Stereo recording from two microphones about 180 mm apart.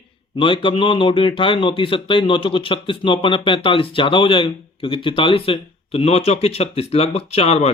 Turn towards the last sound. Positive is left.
turn(degrees=35)  # may be behind; listen again after turning